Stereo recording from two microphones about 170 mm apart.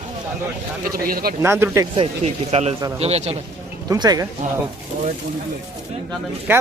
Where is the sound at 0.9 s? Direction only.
60° right (ahead or behind).